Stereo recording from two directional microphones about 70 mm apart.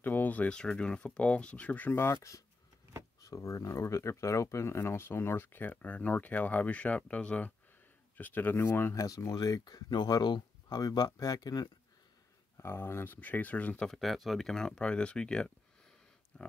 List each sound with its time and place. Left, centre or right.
0.0 s speech: left
2.0 s speech: left
8.9 s speech: left
9.3 s speech: left
12.5 s speech: left
13.8 s speech: centre